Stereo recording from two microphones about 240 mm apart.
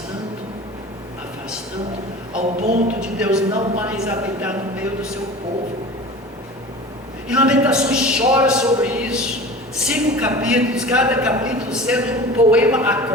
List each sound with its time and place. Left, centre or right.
2.6 s speech: right
3.0 s a woman's voice: centre
7.3 s a woman's voice: centre